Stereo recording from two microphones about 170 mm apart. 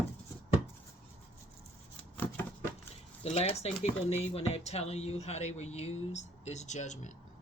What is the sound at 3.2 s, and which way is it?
Speech, 35° left (ahead or behind).